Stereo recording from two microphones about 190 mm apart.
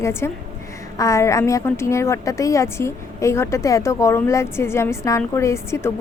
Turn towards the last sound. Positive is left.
turn(degrees=15)  # may be behind; listen again after turning